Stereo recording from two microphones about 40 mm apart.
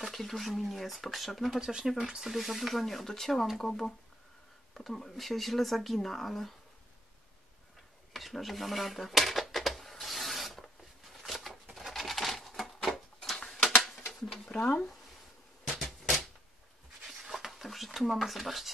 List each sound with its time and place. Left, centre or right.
0.0 s speech: centre
1.6 s speech: centre
2.0 s speech: centre
8.1 s a sound: centre
14.2 s speech: centre
15.8 s a sound: centre
17.1 s speech: centre